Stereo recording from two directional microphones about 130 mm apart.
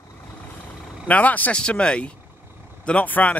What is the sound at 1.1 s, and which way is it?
Speech, 10° left (ahead or behind).